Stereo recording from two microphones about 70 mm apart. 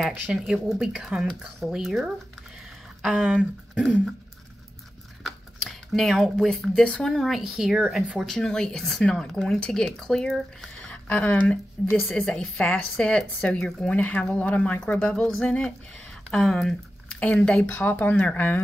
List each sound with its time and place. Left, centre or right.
0.5 s speech: centre
3.3 s speech: centre
5.2 s speech: centre
7.4 s speech: centre
10.9 s speech: centre
12.3 s speech: centre
13.8 s speech: left
16.4 s squish: centre
17.2 s speech: centre
17.6 s speech: left